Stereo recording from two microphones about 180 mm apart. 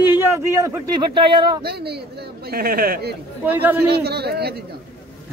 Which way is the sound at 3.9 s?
60° right (ahead or behind).